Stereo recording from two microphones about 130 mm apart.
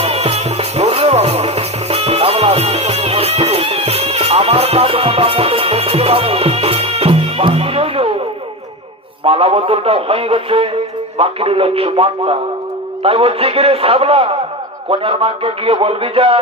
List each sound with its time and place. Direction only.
0.0 s music: 50° right (ahead or behind)
9.2 s a man's voice: 45° right (ahead or behind)